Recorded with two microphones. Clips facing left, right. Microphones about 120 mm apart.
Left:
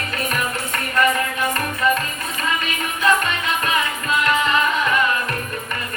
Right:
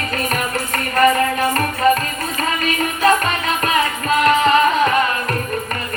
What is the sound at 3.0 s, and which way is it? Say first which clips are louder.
Music: right 2 dB; 40° right (ahead or behind).